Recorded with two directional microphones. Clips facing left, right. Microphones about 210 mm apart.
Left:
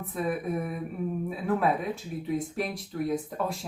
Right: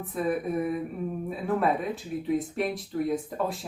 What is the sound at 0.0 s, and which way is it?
Speech, centre (ahead or behind).